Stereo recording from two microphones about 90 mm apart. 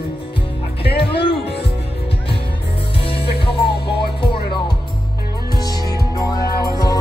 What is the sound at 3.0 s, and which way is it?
Music, 80° left.